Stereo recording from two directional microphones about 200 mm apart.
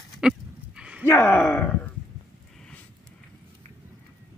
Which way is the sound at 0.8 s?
5° right (ahead or behind).